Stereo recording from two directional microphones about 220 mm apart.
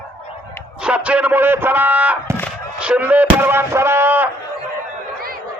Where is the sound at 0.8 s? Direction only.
5° right (ahead or behind).